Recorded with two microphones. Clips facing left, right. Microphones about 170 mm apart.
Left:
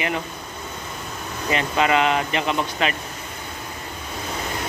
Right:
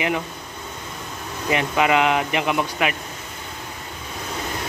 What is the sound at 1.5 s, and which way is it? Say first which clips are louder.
Speech: right 1 dB; 15° right (ahead or behind).